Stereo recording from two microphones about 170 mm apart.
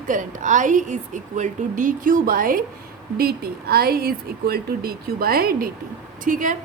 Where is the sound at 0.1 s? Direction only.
50° right (ahead or behind).